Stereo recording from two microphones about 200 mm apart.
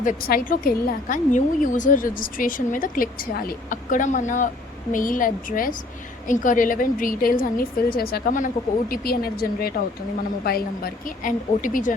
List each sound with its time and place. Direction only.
0.0 s a woman's voice: 45° left (ahead or behind)